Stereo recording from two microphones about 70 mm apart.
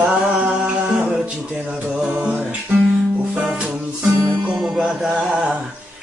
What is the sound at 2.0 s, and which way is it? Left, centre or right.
Music, right.